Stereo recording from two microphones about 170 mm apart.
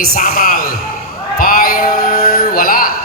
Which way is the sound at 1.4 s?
55° left (ahead or behind).